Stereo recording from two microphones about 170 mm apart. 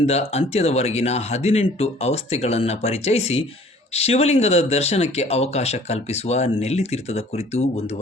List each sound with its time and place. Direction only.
0.0 s speech: 40° left (ahead or behind)